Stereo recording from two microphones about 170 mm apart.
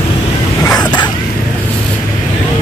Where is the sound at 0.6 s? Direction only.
20° left (ahead or behind).